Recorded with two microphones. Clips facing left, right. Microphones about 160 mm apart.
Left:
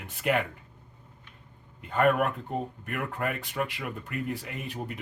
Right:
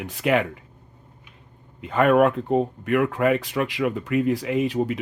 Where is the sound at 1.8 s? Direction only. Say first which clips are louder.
Right 7 dB; 90° right.